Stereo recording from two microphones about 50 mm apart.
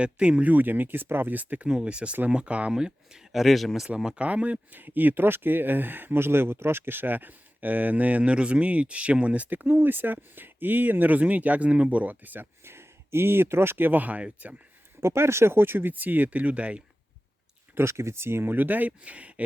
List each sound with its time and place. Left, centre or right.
0.0 s speech: right
1.7 s speech: right; by 3.8 s centre
3.8 s speech: right
4.7 s speech: right
12.6 s speech: right
15.0 s speech: right
17.7 s speech: right
18.5 s speech: right